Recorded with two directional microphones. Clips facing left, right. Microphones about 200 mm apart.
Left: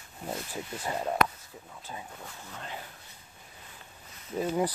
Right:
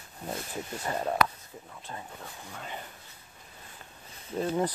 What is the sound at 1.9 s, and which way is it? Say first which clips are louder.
Speech: even; 10° left (ahead or behind).